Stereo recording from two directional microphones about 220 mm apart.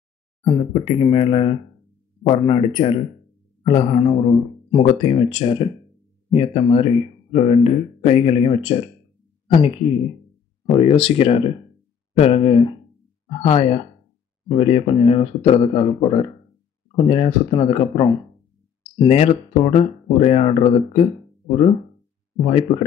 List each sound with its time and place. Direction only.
0.4 s speech: 20° left (ahead or behind)
22.4 s speech: 25° left (ahead or behind)